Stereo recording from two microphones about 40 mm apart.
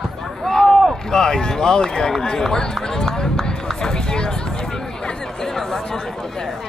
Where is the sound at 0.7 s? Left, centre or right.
Centre.